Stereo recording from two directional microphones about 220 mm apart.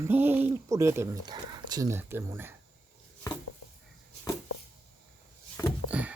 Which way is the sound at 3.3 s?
15° left (ahead or behind).